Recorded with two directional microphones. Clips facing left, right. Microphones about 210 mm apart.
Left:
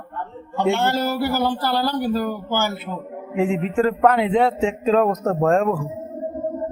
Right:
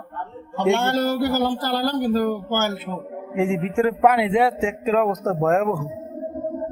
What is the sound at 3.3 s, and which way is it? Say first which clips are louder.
Speech: left 1 dB; 10° right (ahead or behind).